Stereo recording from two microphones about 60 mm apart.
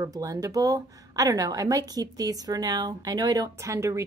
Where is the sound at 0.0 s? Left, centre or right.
Right.